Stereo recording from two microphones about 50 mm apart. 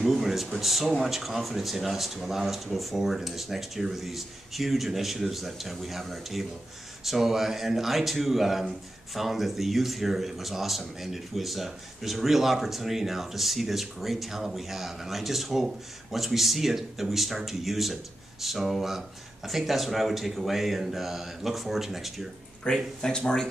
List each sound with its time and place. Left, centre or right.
0.0 s speech: centre
22.7 s speech: left